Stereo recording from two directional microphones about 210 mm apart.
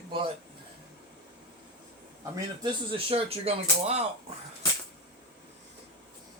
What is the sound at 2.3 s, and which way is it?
Speech, 20° right (ahead or behind).